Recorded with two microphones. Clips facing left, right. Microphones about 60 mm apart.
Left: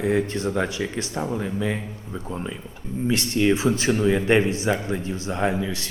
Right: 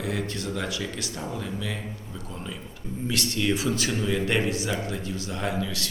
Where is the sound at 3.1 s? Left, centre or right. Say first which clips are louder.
Left 6 dB; left.